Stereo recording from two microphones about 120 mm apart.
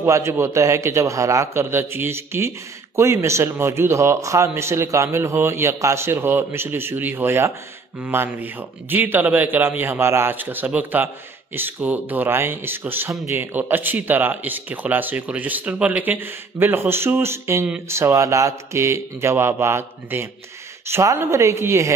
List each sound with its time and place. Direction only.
0.0 s a man's voice: 25° right (ahead or behind)